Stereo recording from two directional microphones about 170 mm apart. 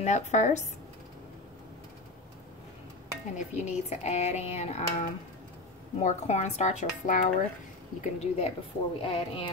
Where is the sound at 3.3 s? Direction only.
40° left (ahead or behind).